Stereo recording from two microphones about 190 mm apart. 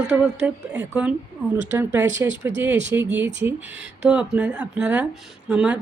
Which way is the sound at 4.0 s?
5° right (ahead or behind).